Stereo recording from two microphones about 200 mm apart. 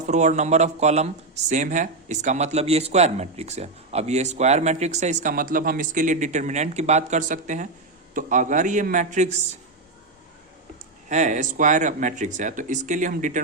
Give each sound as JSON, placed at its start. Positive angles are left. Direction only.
{"t": 0.1, "sound": "speech", "side_deg": -35}
{"t": 11.1, "sound": "speech", "side_deg": -35}